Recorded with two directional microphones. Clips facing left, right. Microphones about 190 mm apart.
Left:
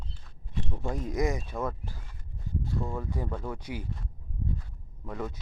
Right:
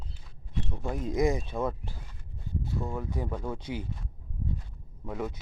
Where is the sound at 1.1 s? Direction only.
25° right (ahead or behind).